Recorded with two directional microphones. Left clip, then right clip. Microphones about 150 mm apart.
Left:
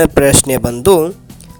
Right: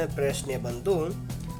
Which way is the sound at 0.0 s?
90° left.